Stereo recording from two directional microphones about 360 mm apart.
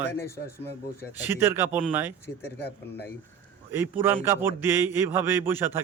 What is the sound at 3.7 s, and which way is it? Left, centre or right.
A man's voice, centre.